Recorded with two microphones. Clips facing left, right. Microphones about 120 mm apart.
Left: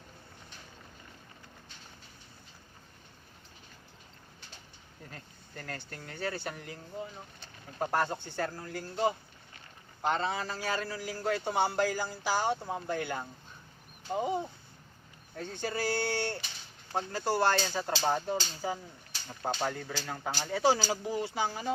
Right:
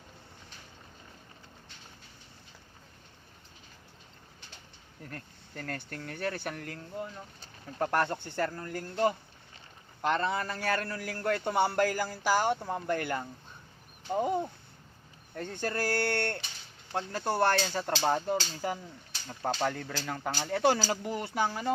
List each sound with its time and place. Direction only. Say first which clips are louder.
5.1 s a man's voice: right 4 dB; 60° right (ahead or behind)
7.8 s a man's voice: right 2 dB; 75° right (ahead or behind)